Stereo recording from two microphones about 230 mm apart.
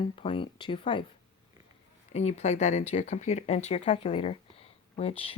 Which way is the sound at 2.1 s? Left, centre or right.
Left.